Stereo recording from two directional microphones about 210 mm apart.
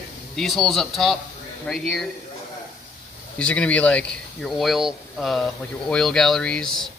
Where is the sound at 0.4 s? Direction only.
Centre (ahead or behind).